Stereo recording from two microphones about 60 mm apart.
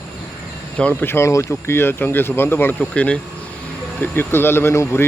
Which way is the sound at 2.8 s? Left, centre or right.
Left.